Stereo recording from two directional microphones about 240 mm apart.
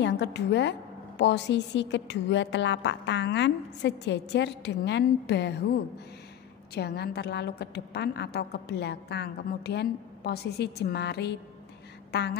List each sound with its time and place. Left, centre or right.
0.0 s a woman's voice: left
6.7 s a woman's voice: left
12.1 s a sound: left